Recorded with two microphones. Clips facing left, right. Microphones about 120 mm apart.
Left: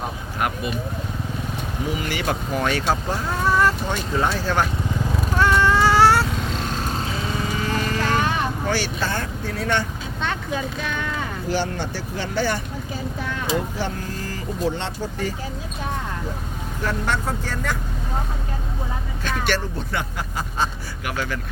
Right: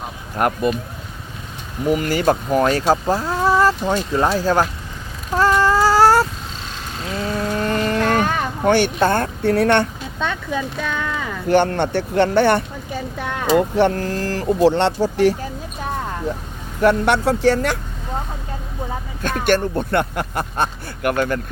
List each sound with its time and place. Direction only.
0.3 s speech: 45° right (ahead or behind)
2.0 s speech: 40° right (ahead or behind)
5.4 s a sound: 40° right (ahead or behind)
7.6 s vehicle: 60° right (ahead or behind)
11.4 s speech: 60° right (ahead or behind)
14.3 s speech: 75° right (ahead or behind)
16.8 s speech: 70° right (ahead or behind)
19.2 s speech: 50° right (ahead or behind)